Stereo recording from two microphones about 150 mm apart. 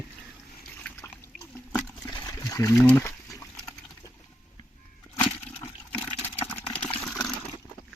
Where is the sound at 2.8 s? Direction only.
15° left (ahead or behind).